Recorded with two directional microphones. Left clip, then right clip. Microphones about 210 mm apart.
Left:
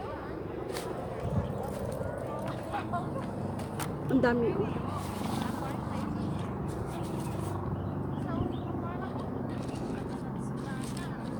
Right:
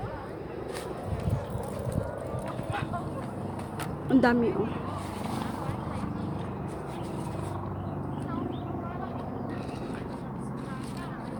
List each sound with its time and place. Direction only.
4.1 s speech: 40° right (ahead or behind)